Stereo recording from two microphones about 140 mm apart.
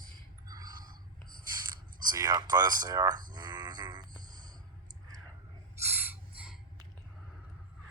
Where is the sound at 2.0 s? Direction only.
25° right (ahead or behind).